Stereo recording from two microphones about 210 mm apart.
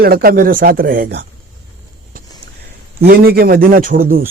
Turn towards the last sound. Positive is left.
turn(degrees=-40)  # may be behind; listen again after turning